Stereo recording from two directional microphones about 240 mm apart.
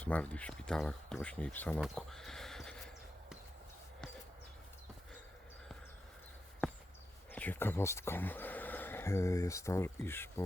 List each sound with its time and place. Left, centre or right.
0.0 s speech: centre
1.8 s neigh: centre
7.3 s speech: centre